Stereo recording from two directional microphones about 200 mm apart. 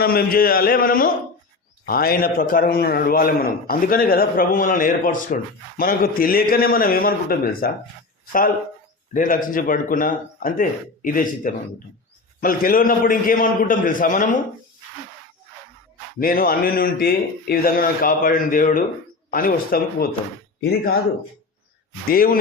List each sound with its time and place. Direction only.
0.0 s a man's voice: 50° left (ahead or behind)
9.1 s a man's voice: 40° left (ahead or behind)
16.2 s a man's voice: 45° left (ahead or behind)
22.1 s a man's voice: 45° left (ahead or behind)